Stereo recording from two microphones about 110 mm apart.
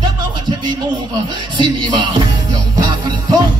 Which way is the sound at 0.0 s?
45° right (ahead or behind).